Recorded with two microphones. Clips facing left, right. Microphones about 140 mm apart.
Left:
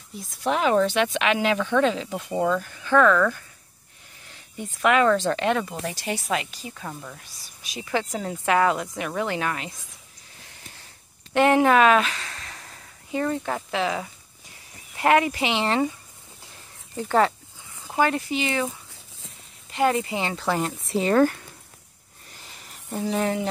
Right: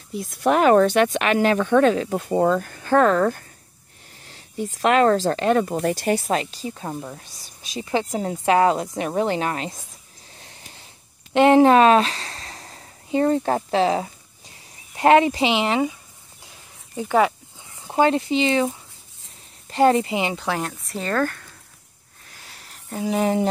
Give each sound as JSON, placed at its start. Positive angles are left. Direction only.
{"t": 0.1, "sound": "speech", "side_deg": -65}
{"t": 4.7, "sound": "speech", "side_deg": -35}
{"t": 11.3, "sound": "a woman's voice", "side_deg": -25}
{"t": 17.8, "sound": "speech", "side_deg": -25}
{"t": 19.7, "sound": "speech", "side_deg": -30}
{"t": 20.3, "sound": "speech", "side_deg": 5}
{"t": 21.0, "sound": "speech", "side_deg": 15}
{"t": 22.9, "sound": "speech", "side_deg": -5}